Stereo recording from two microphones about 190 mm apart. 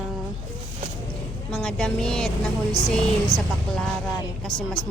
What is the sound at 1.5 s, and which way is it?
A woman's voice, 5° left (ahead or behind).